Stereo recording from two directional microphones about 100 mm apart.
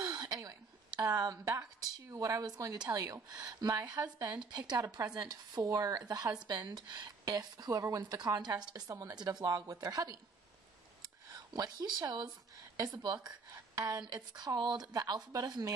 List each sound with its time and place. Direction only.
0.0 s speech: 45° right (ahead or behind)
4.4 s speech: 45° right (ahead or behind)
11.3 s speech: 40° right (ahead or behind)